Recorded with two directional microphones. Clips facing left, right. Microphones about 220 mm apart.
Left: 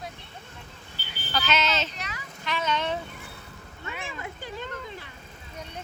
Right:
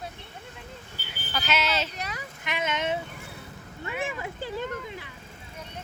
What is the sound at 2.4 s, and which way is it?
Speech, 20° right (ahead or behind).